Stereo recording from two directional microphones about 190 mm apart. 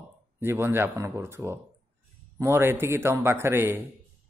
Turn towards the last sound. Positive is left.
turn(degrees=-10)  # may be behind; listen again after turning